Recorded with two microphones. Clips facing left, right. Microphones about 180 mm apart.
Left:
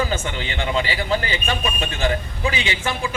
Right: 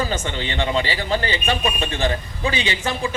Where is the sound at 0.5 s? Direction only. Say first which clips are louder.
Right 1 dB; 35° right (ahead or behind).